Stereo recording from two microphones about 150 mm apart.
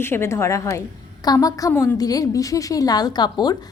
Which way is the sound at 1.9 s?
25° left (ahead or behind).